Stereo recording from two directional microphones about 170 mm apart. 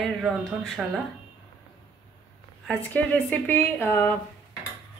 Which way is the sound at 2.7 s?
10° left (ahead or behind).